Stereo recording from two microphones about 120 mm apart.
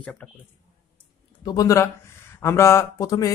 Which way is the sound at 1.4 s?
30° left (ahead or behind).